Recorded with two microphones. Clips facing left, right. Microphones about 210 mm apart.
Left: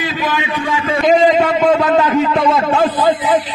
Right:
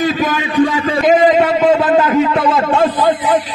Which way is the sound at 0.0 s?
45° right (ahead or behind).